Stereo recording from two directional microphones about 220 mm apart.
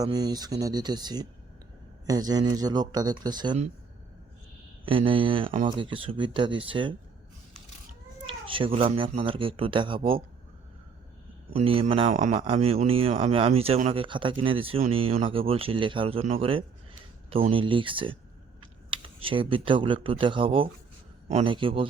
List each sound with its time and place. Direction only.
0.0 s speech: 20° right (ahead or behind)
4.9 s speech: 25° right (ahead or behind)
8.3 s speech: 25° right (ahead or behind)
11.5 s speech: 25° right (ahead or behind)